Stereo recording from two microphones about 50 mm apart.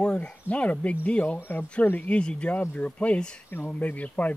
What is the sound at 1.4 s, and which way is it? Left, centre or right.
Speech, left.